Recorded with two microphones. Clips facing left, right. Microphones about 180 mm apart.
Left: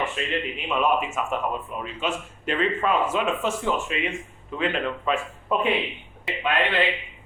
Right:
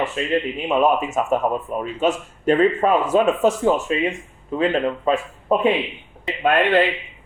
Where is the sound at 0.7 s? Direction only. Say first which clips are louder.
Right 5 dB; 40° right (ahead or behind).